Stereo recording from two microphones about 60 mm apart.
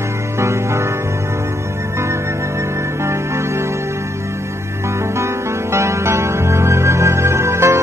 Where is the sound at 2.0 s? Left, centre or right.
Right.